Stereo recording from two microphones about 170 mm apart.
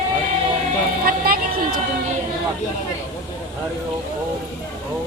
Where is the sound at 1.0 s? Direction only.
60° right (ahead or behind).